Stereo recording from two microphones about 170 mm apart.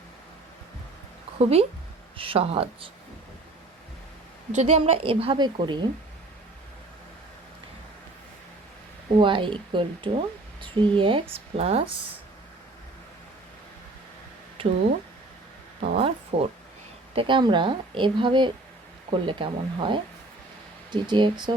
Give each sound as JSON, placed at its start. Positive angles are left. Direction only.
{"t": 1.4, "sound": "a woman's voice", "side_deg": -35}
{"t": 4.5, "sound": "a woman's voice", "side_deg": -40}
{"t": 9.1, "sound": "a woman's voice", "side_deg": -30}
{"t": 16.0, "sound": "a woman's voice", "side_deg": -35}